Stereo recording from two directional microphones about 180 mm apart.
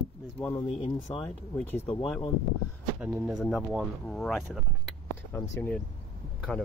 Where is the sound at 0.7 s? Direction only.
35° left (ahead or behind).